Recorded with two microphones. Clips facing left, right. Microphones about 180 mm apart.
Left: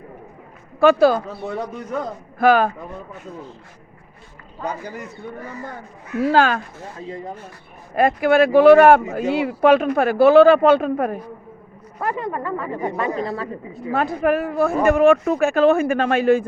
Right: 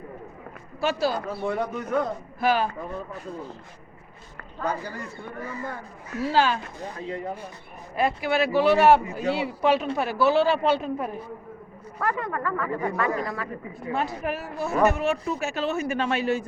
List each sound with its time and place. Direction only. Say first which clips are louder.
0.8 s speech: left 11 dB; 55° left (ahead or behind)
2.4 s speech: left 8 dB; 55° left (ahead or behind)
4.6 s a man's voice: left 1 dB; 15° left (ahead or behind)
6.1 s speech: left 6 dB; 55° left (ahead or behind)
7.9 s speech: left 8 dB; 50° left (ahead or behind)
11.9 s speech: left 3 dB; 20° left (ahead or behind)
13.9 s speech: left 9 dB; 55° left (ahead or behind)